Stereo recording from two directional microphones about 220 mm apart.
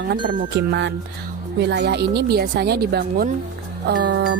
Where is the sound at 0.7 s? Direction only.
55° right (ahead or behind).